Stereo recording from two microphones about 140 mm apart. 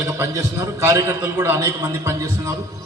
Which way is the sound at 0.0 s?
20° right (ahead or behind).